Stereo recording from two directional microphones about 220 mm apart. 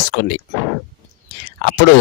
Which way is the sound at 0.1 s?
50° left (ahead or behind).